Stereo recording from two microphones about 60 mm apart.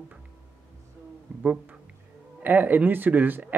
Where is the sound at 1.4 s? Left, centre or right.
Right.